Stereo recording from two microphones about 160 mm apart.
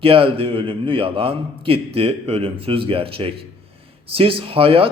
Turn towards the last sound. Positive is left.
turn(degrees=-35)  # may be behind; listen again after turning